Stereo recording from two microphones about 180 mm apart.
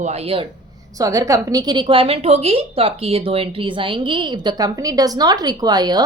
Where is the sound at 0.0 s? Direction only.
35° right (ahead or behind).